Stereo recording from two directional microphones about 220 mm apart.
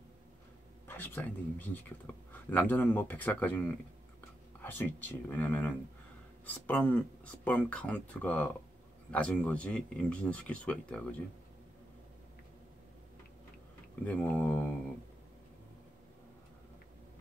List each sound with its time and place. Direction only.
0.8 s speech: 10° left (ahead or behind)
14.0 s speech: 5° left (ahead or behind)